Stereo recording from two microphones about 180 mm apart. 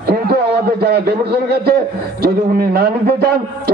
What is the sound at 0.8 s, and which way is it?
A man's voice, 65° right (ahead or behind).